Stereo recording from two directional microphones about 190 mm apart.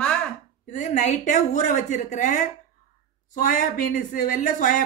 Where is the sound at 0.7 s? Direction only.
40° left (ahead or behind).